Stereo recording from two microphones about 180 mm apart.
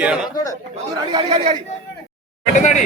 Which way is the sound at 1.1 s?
30° right (ahead or behind).